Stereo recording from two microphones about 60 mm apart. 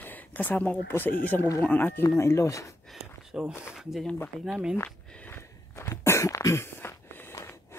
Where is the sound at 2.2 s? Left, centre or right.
Left.